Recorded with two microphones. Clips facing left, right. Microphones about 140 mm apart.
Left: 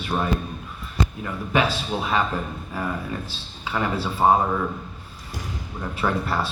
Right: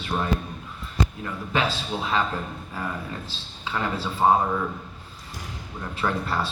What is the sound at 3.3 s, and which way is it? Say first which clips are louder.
Speech: left 2 dB; 10° left (ahead or behind).